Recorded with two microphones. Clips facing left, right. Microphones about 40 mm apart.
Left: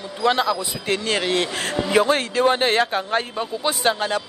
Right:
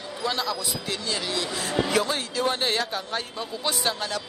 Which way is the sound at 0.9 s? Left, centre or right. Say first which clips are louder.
Left 10 dB; left.